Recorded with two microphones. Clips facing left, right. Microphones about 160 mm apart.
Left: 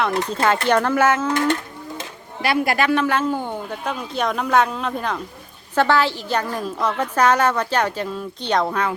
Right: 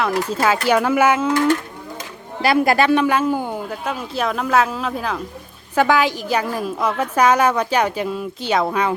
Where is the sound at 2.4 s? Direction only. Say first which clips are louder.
Right 4 dB; 40° right (ahead or behind).